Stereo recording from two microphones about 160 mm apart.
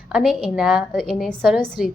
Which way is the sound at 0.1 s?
Centre (ahead or behind).